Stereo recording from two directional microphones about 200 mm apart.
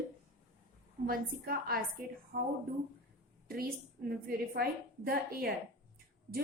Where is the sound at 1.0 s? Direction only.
45° right (ahead or behind).